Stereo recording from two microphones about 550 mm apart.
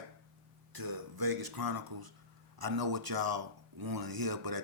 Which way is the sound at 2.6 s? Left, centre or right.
Right.